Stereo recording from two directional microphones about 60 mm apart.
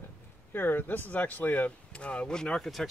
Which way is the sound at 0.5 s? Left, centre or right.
Left.